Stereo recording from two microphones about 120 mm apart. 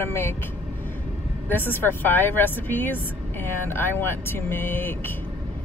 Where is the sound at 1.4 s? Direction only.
15° left (ahead or behind).